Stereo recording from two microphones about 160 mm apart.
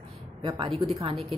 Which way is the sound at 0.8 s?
25° right (ahead or behind).